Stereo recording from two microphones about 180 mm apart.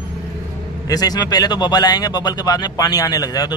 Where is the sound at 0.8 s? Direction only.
20° left (ahead or behind).